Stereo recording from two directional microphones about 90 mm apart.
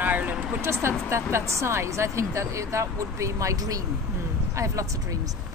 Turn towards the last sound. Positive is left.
turn(degrees=-35)  # may be behind; listen again after turning